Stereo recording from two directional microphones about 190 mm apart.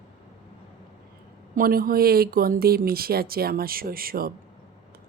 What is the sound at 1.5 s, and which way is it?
Speech, 50° right (ahead or behind).